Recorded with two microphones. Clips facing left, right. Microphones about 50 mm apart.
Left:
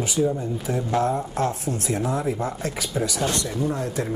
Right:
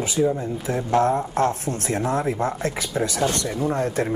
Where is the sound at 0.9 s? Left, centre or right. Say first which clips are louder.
Right 4 dB; right.